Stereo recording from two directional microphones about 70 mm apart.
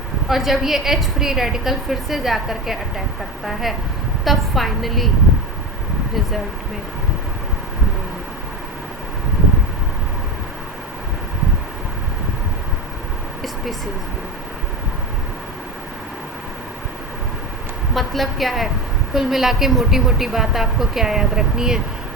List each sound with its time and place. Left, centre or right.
0.3 s a woman's voice: centre
17.9 s a woman's voice: centre